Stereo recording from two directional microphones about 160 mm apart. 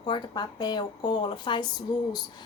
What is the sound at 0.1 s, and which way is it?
A woman's voice, 25° left (ahead or behind).